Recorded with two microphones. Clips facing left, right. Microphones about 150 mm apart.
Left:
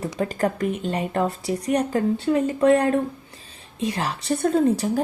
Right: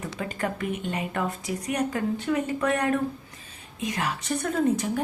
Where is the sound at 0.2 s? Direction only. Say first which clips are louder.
Left 7 dB; 35° left (ahead or behind).